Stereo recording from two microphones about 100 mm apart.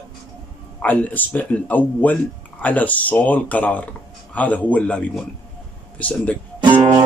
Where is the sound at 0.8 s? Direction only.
15° left (ahead or behind).